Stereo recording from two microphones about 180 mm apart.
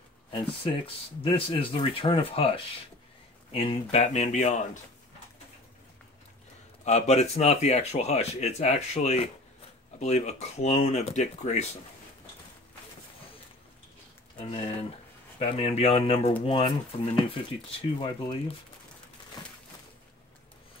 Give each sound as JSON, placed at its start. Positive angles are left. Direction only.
{"t": 0.3, "sound": "speech", "side_deg": 30}
{"t": 6.8, "sound": "speech", "side_deg": 40}
{"t": 14.4, "sound": "speech", "side_deg": 35}